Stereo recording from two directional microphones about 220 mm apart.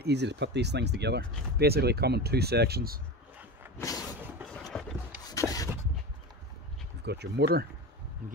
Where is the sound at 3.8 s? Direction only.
15° left (ahead or behind).